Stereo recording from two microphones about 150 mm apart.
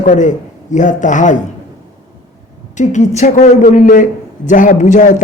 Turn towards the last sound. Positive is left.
turn(degrees=60)  # may be behind; listen again after turning